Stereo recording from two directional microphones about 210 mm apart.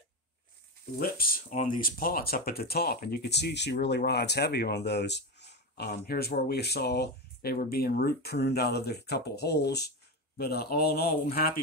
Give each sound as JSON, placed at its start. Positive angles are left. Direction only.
{"t": 0.9, "sound": "speech", "side_deg": 45}